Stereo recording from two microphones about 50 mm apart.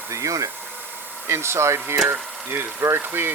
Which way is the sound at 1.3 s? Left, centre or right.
Right.